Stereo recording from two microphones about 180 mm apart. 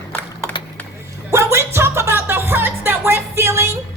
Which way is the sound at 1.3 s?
15° right (ahead or behind).